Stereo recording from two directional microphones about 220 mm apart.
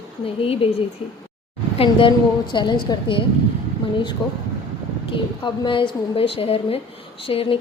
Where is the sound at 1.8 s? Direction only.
25° left (ahead or behind).